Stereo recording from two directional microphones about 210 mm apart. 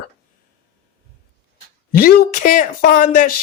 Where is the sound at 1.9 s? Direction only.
45° left (ahead or behind).